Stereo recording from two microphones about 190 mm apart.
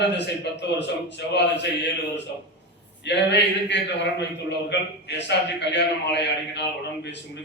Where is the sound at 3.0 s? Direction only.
65° left (ahead or behind).